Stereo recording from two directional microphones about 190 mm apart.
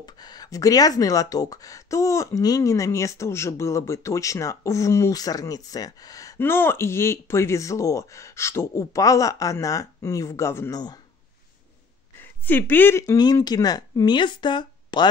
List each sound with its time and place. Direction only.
0.0 s speech: 20° left (ahead or behind)
12.2 s speech: 10° left (ahead or behind)